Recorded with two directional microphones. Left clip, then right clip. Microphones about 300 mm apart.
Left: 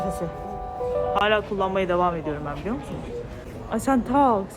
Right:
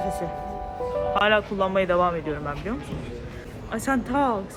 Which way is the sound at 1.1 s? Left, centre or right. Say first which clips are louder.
Right 2 dB; centre.